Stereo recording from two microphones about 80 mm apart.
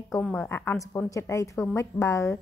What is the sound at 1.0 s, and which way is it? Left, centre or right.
Speech, left.